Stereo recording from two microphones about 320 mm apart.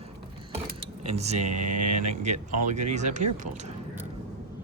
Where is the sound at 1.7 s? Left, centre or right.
Right.